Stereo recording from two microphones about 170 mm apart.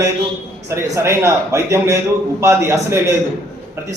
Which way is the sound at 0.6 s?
15° right (ahead or behind).